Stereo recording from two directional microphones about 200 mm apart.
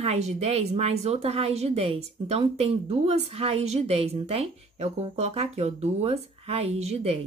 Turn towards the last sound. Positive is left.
turn(degrees=-30)  # may be behind; listen again after turning